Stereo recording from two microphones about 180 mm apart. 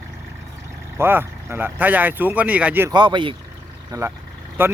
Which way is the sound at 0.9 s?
10° right (ahead or behind).